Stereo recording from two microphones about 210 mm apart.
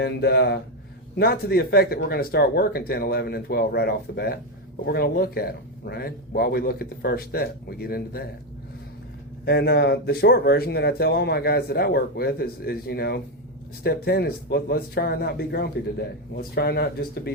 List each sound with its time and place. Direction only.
0.0 s speech: 50° left (ahead or behind)
9.5 s speech: 50° left (ahead or behind)